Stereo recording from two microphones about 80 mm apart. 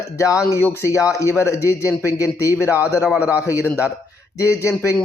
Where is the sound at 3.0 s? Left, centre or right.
Centre.